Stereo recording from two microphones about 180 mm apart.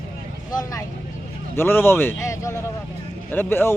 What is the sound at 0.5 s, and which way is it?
A man's voice, 20° left (ahead or behind).